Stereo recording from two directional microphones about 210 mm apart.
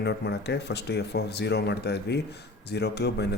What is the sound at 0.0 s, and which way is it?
Speech, 55° left (ahead or behind).